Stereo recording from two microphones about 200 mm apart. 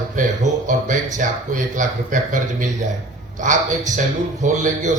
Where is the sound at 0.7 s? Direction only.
40° right (ahead or behind).